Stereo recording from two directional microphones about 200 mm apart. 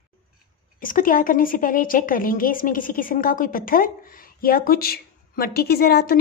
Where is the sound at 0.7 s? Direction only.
45° left (ahead or behind).